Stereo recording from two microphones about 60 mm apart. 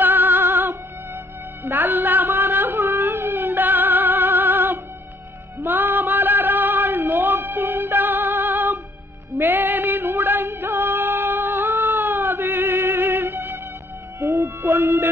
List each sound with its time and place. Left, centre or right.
0.0 s music: right
14.2 s music: right